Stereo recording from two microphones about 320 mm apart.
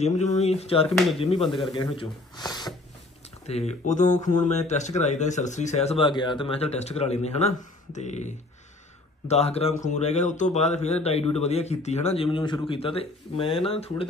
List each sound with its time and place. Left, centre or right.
0.0 s speech: left
2.0 s speech: centre